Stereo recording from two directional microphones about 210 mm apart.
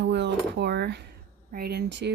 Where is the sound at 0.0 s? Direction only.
55° right (ahead or behind).